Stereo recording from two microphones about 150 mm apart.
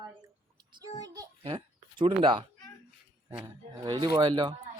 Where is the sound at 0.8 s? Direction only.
25° right (ahead or behind).